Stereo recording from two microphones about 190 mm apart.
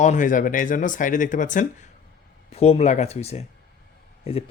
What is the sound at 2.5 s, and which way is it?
Speech, 35° left (ahead or behind).